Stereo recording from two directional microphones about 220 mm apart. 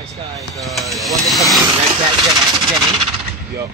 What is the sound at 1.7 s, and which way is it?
Speech, 25° right (ahead or behind).